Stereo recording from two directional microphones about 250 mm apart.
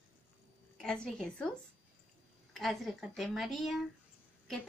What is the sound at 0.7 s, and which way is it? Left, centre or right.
Speech, centre.